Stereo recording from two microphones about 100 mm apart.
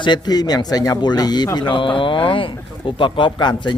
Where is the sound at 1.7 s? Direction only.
55° left (ahead or behind).